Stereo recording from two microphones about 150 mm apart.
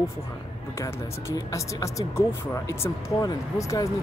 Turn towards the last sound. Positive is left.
turn(degrees=20)  # may be behind; listen again after turning